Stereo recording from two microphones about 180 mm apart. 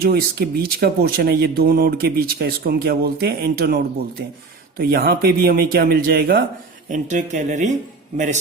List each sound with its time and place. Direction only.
0.0 s speech: 60° right (ahead or behind)
4.8 s speech: 55° right (ahead or behind)
6.9 s a man's voice: 45° right (ahead or behind)